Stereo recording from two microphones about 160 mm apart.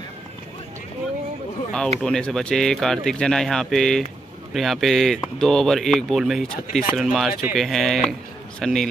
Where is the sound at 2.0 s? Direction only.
5° left (ahead or behind).